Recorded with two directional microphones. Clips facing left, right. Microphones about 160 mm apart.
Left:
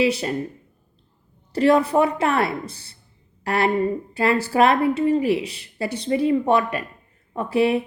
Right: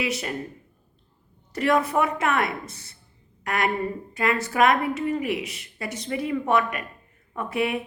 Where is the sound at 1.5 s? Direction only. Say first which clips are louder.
Left 5 dB; 30° left (ahead or behind).